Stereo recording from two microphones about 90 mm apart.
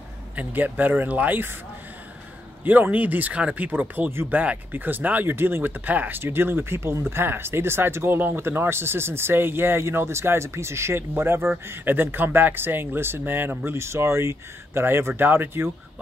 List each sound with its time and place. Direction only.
0.4 s speech: 20° right (ahead or behind)
2.6 s speech: 20° right (ahead or behind)